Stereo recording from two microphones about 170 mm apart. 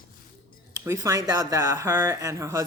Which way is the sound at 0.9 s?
20° right (ahead or behind).